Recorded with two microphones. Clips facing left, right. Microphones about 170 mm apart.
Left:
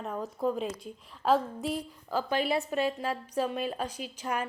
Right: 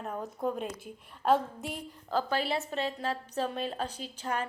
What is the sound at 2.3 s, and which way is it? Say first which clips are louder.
Speech: left 5 dB; 30° right (ahead or behind).